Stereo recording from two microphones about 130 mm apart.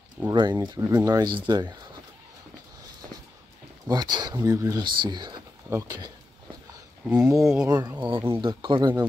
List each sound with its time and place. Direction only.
0.3 s speech: 35° right (ahead or behind)
3.8 s speech: 30° right (ahead or behind)
5.7 s speech: 20° right (ahead or behind)
7.1 s speech: 5° right (ahead or behind)
7.6 s speech: 25° right (ahead or behind)
8.3 s speech: 40° right (ahead or behind)